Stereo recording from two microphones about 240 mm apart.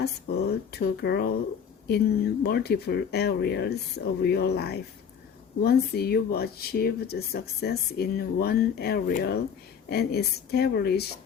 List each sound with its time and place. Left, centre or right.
0.0 s speech: left